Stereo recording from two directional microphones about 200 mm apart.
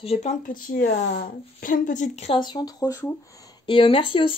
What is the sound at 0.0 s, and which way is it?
Speech, 30° left (ahead or behind).